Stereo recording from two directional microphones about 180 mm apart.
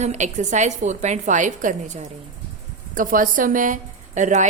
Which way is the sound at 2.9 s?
50° right (ahead or behind).